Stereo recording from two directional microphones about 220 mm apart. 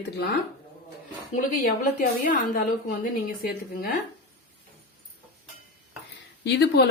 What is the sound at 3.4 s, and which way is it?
Speech, 45° left (ahead or behind).